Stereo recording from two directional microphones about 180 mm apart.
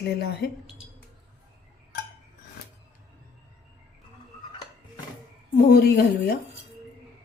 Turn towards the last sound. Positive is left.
turn(degrees=60)  # may be behind; listen again after turning